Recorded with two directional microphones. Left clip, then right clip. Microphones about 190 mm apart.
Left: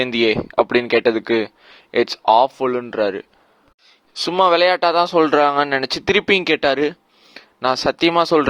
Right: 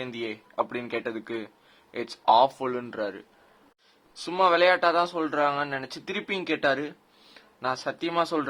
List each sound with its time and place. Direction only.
0.0 s speech: 45° left (ahead or behind)
2.6 s speech: 30° left (ahead or behind); by 8.4 s 45° left (ahead or behind)